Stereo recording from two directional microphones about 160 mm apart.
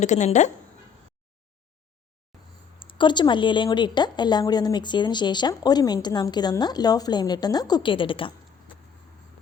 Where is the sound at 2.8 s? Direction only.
30° left (ahead or behind).